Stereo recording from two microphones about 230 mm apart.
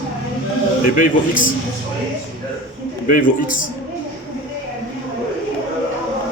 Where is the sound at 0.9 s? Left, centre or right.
Left.